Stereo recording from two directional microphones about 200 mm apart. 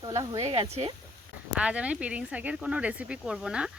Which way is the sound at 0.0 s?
15° right (ahead or behind).